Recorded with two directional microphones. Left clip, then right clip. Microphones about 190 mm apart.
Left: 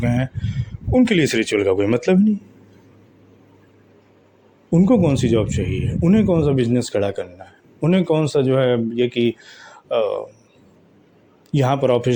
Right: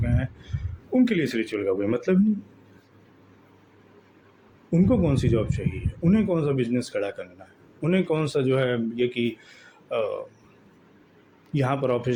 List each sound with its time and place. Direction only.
0.0 s speech: 40° left (ahead or behind)
4.7 s speech: 35° left (ahead or behind)
11.5 s speech: 35° left (ahead or behind)